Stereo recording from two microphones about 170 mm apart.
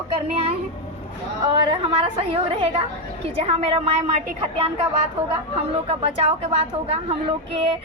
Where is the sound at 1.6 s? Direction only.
35° right (ahead or behind).